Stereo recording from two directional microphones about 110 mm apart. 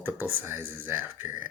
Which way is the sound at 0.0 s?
20° right (ahead or behind).